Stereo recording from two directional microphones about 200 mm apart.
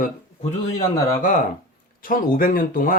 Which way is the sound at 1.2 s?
40° left (ahead or behind).